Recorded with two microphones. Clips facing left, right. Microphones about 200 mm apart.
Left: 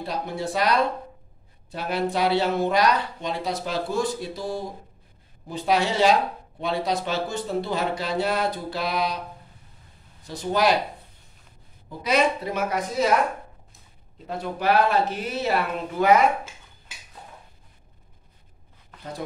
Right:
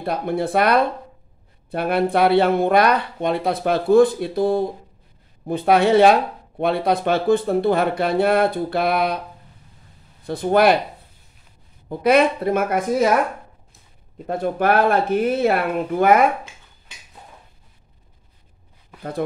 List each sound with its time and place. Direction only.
0.0 s speech: 55° right (ahead or behind)
10.2 s speech: 55° right (ahead or behind)
11.9 s speech: 55° right (ahead or behind)